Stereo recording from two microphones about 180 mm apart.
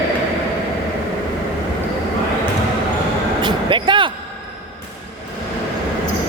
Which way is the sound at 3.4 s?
25° right (ahead or behind).